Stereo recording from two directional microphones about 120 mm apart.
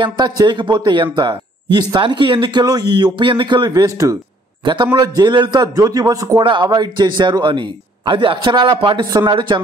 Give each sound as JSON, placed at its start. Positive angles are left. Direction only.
{"t": 0.0, "sound": "speech", "side_deg": -40}